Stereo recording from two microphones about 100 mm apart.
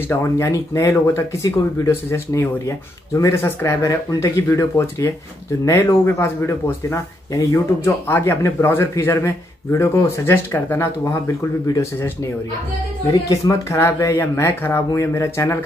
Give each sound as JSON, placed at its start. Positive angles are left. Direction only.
{"t": 0.1, "sound": "speech", "side_deg": 30}
{"t": 5.7, "sound": "speech", "side_deg": 25}